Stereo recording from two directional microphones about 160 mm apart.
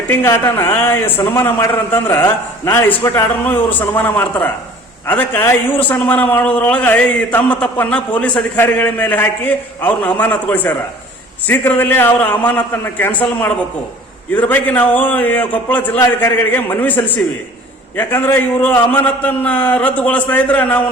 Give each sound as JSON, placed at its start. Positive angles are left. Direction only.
{"t": 0.1, "sound": "a man's voice", "side_deg": 15}